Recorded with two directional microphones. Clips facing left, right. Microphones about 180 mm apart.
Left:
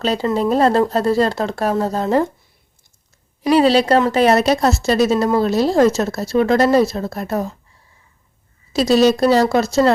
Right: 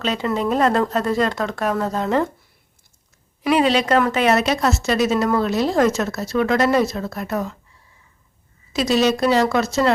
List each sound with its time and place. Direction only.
0.0 s a woman's voice: 35° left (ahead or behind)
3.4 s a woman's voice: 35° left (ahead or behind)
8.7 s a woman's voice: 35° left (ahead or behind)